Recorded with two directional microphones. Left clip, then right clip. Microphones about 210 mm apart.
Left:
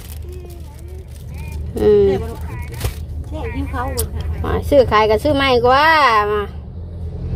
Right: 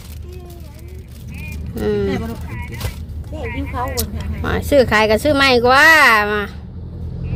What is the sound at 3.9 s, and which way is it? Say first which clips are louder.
Speech: right 1 dB; 5° left (ahead or behind).